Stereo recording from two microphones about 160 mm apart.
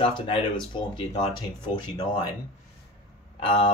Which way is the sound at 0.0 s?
35° left (ahead or behind).